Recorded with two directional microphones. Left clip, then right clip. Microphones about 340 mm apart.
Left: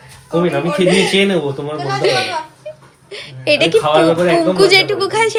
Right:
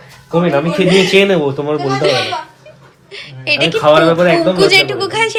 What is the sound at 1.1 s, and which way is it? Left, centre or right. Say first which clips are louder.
Speech: right 4 dB; right.